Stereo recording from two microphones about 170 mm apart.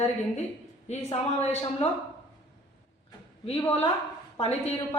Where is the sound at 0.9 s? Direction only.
40° left (ahead or behind).